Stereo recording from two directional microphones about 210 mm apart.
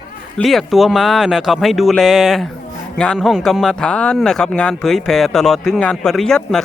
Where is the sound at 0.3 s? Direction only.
Centre (ahead or behind).